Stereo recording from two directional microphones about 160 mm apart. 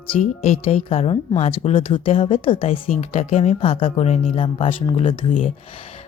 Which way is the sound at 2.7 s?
45° left (ahead or behind).